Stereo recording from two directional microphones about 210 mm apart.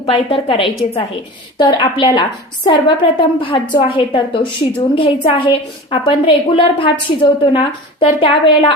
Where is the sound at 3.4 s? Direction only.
25° left (ahead or behind).